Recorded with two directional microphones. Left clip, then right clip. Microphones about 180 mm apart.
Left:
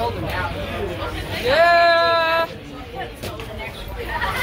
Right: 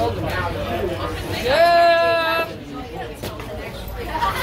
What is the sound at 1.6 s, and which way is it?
Child singing, 25° left (ahead or behind).